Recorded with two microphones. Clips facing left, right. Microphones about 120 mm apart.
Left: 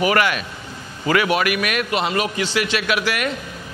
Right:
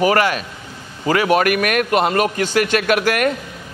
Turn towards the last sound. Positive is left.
turn(degrees=-50)  # may be behind; listen again after turning